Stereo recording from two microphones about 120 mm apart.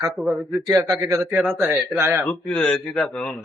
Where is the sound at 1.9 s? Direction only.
20° right (ahead or behind).